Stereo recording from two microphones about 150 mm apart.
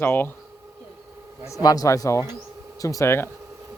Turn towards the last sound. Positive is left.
turn(degrees=15)  # may be behind; listen again after turning